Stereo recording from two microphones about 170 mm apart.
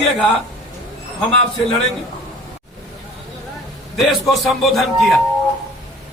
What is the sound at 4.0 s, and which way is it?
A man's voice, centre (ahead or behind).